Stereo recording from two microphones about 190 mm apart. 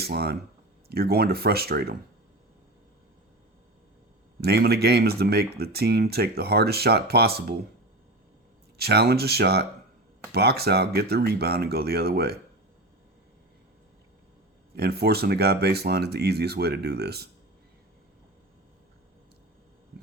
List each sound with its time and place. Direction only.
0.0 s speech: 55° right (ahead or behind)
4.4 s speech: 55° right (ahead or behind)
8.8 s speech: 60° right (ahead or behind)
14.8 s speech: 55° right (ahead or behind)